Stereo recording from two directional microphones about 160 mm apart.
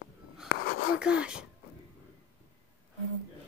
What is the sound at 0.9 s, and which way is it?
Speech, 5° right (ahead or behind).